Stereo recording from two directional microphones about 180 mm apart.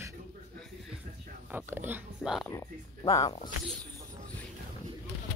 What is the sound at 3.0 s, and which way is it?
Speech, 20° left (ahead or behind).